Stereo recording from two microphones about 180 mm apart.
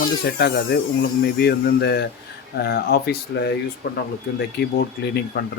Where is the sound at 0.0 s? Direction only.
60° left (ahead or behind).